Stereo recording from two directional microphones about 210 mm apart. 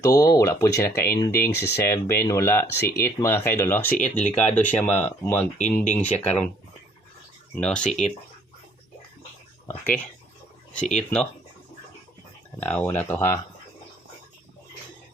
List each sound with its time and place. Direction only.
0.0 s speech: 15° left (ahead or behind)
5.5 s speech: 35° left (ahead or behind)
5.9 s speech: 5° left (ahead or behind)
7.5 s speech: 5° left (ahead or behind)
9.6 s speech: 10° left (ahead or behind)
12.5 s speech: 10° left (ahead or behind)